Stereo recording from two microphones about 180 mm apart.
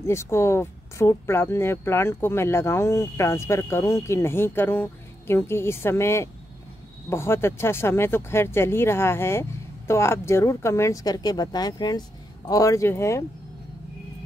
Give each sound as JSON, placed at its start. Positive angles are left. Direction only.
{"t": 0.0, "sound": "speech", "side_deg": 15}